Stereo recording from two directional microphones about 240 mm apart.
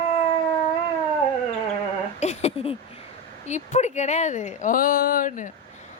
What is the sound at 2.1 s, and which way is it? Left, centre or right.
A woman's voice, left.